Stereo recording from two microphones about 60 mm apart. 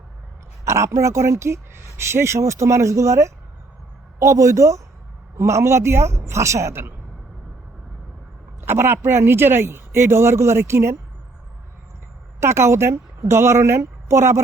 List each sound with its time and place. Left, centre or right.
0.6 s speech: right
8.6 s speech: right
12.4 s a woman's voice: right